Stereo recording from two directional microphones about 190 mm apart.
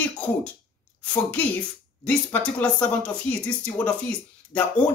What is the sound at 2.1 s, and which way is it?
Speech, 5° left (ahead or behind).